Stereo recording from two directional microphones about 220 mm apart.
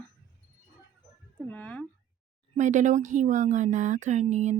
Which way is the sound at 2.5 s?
35° right (ahead or behind).